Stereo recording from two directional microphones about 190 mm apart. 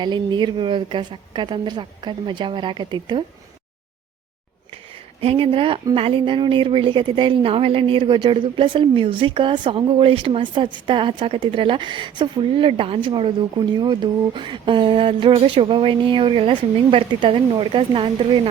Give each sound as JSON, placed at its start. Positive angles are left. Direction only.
{"t": 0.0, "sound": "a woman's voice", "side_deg": -25}
{"t": 5.2, "sound": "a woman's voice", "side_deg": -30}